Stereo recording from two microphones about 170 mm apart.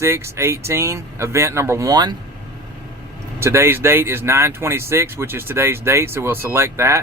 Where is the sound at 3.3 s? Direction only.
15° right (ahead or behind).